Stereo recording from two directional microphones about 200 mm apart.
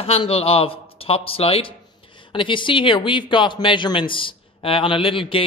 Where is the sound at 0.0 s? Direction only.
30° left (ahead or behind).